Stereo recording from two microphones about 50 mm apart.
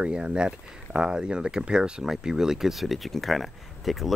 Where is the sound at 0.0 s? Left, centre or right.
Right.